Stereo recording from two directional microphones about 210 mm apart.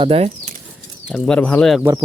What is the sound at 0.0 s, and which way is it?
Speech, 30° right (ahead or behind).